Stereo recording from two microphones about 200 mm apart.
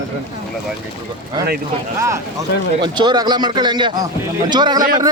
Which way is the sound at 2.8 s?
20° right (ahead or behind).